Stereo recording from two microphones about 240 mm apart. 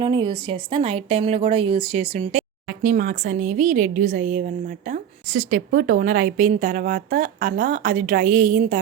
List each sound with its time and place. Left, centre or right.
0.0 s a woman's voice: centre